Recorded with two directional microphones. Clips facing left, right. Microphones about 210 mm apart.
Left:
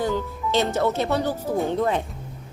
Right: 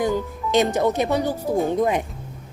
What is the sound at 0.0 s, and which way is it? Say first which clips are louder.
Speech: right 2 dB; 15° right (ahead or behind).